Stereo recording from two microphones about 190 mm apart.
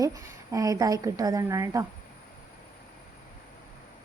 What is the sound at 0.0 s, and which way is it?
A woman's voice, 15° right (ahead or behind).